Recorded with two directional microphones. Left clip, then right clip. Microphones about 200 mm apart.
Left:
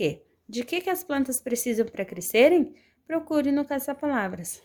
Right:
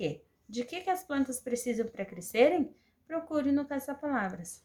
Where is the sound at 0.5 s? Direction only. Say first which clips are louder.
Left 5 dB; 45° left (ahead or behind).